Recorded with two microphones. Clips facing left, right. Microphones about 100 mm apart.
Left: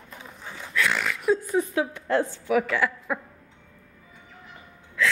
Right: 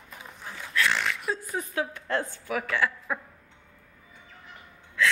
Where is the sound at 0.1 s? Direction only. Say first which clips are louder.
Left 1 dB; centre (ahead or behind).